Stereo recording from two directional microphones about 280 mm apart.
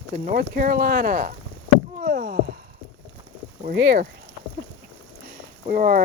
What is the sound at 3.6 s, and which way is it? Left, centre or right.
Speech, right.